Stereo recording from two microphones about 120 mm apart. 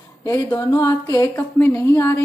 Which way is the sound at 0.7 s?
30° left (ahead or behind).